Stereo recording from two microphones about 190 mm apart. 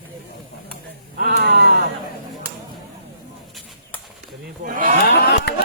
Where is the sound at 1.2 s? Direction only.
60° right (ahead or behind).